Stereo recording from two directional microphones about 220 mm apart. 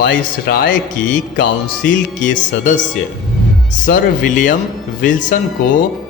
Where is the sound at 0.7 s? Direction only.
35° left (ahead or behind).